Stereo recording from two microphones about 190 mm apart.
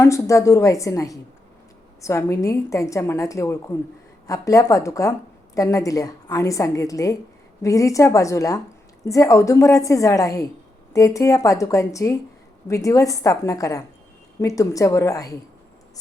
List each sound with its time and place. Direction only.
0.0 s a woman's voice: 15° left (ahead or behind)